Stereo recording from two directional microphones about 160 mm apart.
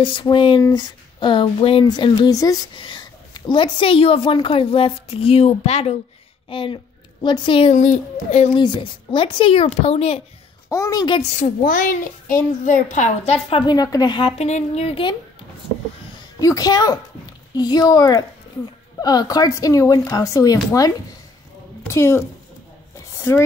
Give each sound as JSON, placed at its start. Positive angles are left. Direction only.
{"t": 0.0, "sound": "speech", "side_deg": 30}
{"t": 7.7, "sound": "a child's voice", "side_deg": 50}
{"t": 8.5, "sound": "speech", "side_deg": 30}
{"t": 10.7, "sound": "speech", "side_deg": 20}
{"t": 11.1, "sound": "a child's voice", "side_deg": 55}
{"t": 14.4, "sound": "speech", "side_deg": 45}
{"t": 16.3, "sound": "a woman's voice", "side_deg": 20}